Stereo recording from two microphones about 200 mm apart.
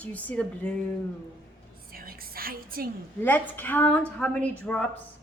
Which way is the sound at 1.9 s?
45° right (ahead or behind).